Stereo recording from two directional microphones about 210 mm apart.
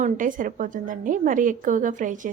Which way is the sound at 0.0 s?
40° right (ahead or behind).